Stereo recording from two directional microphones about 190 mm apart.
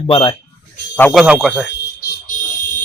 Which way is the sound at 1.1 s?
5° right (ahead or behind).